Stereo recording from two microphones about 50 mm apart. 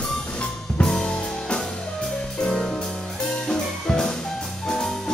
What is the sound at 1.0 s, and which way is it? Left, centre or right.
Music, centre.